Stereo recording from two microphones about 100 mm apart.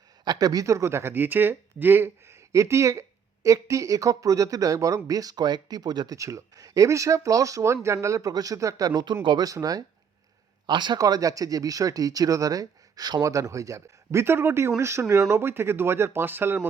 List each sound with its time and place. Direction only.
0.3 s speech: 40° right (ahead or behind)
6.1 s speech: 30° right (ahead or behind); by 9.5 s 50° right (ahead or behind)
9.5 s speech: 40° right (ahead or behind)
10.7 s speech: 50° right (ahead or behind); by 16.6 s 20° right (ahead or behind)